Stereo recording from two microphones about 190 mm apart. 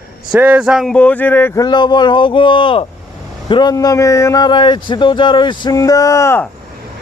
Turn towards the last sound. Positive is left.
turn(degrees=15)  # may be behind; listen again after turning